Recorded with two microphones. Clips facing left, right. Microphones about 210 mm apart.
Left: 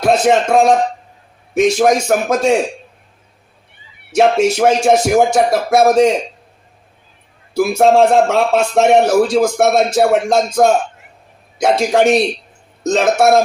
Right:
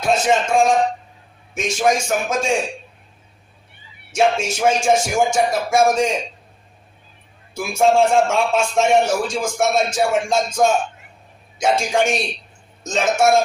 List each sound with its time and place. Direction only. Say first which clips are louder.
0.0 s a man's voice: left 5 dB; 65° left (ahead or behind)
4.1 s a man's voice: left 6 dB; 65° left (ahead or behind)
7.5 s a man's voice: left 5 dB; 65° left (ahead or behind)